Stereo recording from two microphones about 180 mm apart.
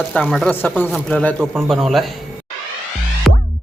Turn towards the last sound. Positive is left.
turn(degrees=0)  # may be behind; listen again after turning